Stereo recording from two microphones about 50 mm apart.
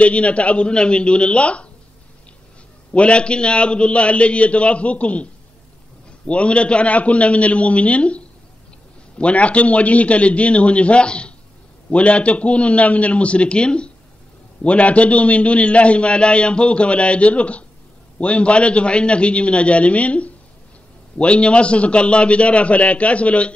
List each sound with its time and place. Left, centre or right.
0.0 s a man's voice: left
2.9 s a man's voice: left
9.2 s a man's voice: left